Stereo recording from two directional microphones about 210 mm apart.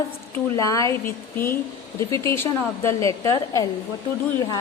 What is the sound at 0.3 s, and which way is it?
A woman's voice, 15° left (ahead or behind).